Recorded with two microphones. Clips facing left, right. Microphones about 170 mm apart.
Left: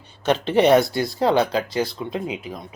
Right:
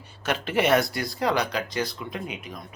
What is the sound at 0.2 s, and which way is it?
Speech, 25° left (ahead or behind).